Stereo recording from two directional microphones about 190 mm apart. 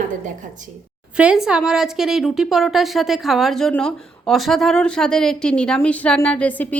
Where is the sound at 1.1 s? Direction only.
5° right (ahead or behind).